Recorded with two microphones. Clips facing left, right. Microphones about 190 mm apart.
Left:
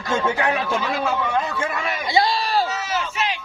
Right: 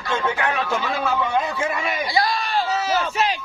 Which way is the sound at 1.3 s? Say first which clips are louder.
Right 1 dB; 5° right (ahead or behind).